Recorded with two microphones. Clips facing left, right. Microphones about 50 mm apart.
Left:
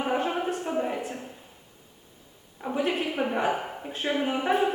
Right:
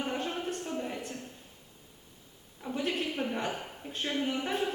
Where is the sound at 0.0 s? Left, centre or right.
Centre.